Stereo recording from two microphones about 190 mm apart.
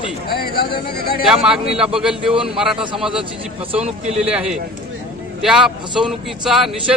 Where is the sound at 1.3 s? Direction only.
5° right (ahead or behind).